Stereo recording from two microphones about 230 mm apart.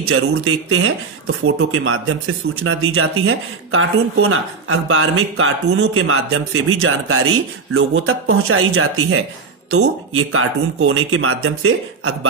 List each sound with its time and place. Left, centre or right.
0.0 s speech: right